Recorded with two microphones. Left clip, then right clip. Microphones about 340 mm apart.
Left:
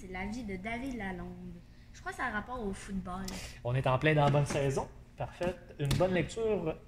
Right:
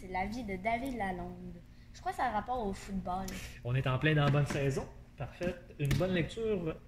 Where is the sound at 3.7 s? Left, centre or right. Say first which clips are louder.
Left 3 dB; centre.